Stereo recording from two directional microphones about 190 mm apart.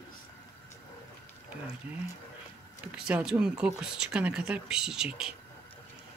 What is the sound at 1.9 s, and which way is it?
Speech, 10° right (ahead or behind).